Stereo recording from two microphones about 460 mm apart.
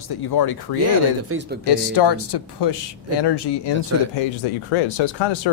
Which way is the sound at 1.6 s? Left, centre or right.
Left.